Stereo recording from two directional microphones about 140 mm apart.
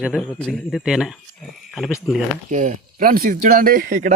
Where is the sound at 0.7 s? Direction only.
5° right (ahead or behind).